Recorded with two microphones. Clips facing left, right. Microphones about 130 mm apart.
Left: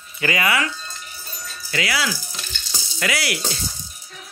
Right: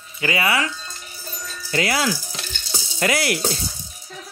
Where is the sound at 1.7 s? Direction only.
45° right (ahead or behind).